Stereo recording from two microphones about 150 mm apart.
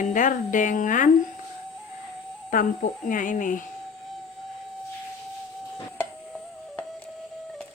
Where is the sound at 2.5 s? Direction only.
65° left (ahead or behind).